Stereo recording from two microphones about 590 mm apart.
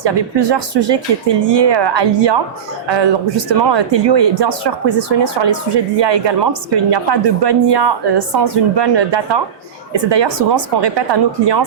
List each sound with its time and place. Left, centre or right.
0.0 s speech: right